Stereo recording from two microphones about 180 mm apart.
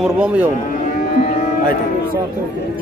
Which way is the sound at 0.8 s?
50° left (ahead or behind).